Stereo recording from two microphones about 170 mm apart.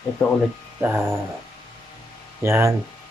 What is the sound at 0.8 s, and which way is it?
Speech, 10° right (ahead or behind).